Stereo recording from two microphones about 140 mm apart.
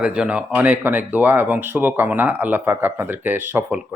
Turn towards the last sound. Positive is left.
turn(degrees=-10)  # may be behind; listen again after turning